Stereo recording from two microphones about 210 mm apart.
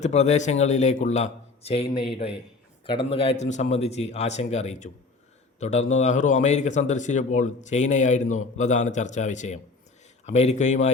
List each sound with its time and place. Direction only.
0.0 s a man's voice: 30° left (ahead or behind)
3.1 s a man's voice: 25° left (ahead or behind)